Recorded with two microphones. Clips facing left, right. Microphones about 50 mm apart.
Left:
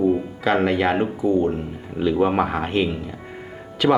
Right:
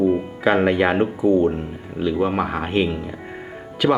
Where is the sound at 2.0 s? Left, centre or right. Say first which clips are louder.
Left 2 dB; centre.